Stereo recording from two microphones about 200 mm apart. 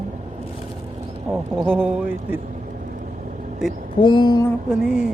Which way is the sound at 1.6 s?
10° right (ahead or behind).